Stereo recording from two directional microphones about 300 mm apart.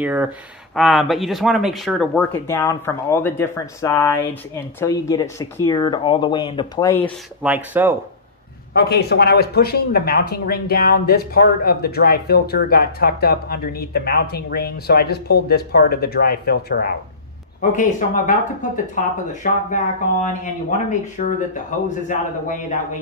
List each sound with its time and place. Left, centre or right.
0.0 s speech: centre
7.4 s speech: centre
8.7 s speech: left
21.2 s speech: left